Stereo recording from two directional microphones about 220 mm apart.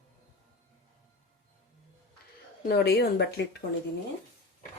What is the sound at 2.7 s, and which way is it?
Speech, 45° left (ahead or behind).